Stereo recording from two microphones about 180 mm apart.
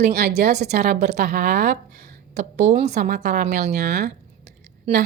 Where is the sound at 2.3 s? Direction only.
40° right (ahead or behind); by 3.6 s 60° right (ahead or behind).